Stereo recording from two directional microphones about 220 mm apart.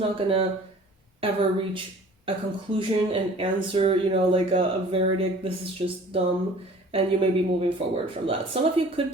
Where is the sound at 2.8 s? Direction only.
25° right (ahead or behind).